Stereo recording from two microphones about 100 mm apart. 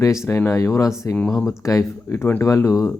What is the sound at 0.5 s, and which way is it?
Speech, 35° left (ahead or behind).